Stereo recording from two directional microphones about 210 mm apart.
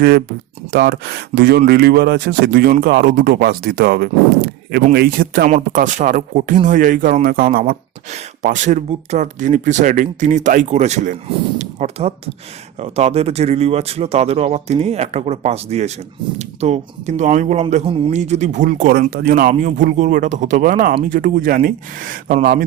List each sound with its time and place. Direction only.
0.7 s speech: 50° right (ahead or behind)